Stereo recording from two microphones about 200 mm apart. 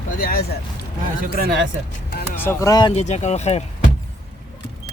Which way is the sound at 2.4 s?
15° left (ahead or behind).